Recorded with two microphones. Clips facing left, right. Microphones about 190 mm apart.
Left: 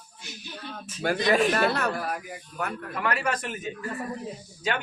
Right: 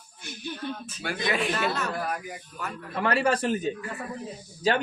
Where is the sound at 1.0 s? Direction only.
45° left (ahead or behind); by 2.7 s 60° left (ahead or behind).